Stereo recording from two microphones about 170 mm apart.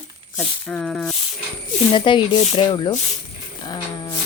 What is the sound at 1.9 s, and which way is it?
Speech, 30° left (ahead or behind).